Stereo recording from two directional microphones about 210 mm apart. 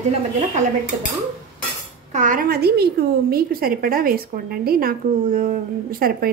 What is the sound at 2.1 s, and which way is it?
A woman's voice, 40° right (ahead or behind).